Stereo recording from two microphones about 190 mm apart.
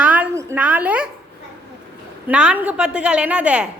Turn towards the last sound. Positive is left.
turn(degrees=-5)  # may be behind; listen again after turning